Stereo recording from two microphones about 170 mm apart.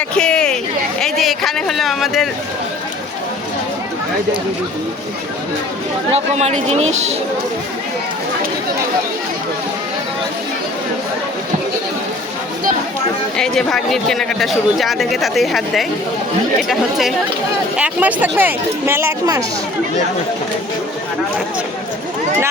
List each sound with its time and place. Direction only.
0.1 s a sound: 5° left (ahead or behind)
6.1 s speech: 40° right (ahead or behind)
13.3 s speech: 5° left (ahead or behind); by 19.5 s 20° right (ahead or behind)